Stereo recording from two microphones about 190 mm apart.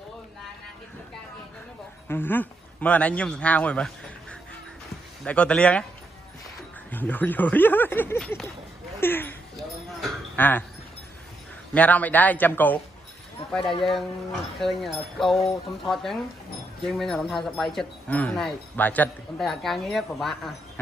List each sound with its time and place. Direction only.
2.0 s speech: 10° left (ahead or behind)
6.9 s speech: 10° left (ahead or behind)
10.3 s speech: 10° left (ahead or behind)
11.7 s speech: 10° left (ahead or behind)
13.6 s speech: 25° left (ahead or behind)
14.6 s speech: centre (ahead or behind)